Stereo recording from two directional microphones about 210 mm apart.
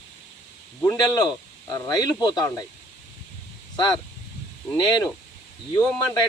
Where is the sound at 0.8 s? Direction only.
15° left (ahead or behind).